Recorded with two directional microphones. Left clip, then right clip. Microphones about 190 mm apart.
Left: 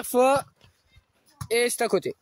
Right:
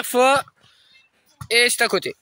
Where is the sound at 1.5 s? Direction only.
10° left (ahead or behind).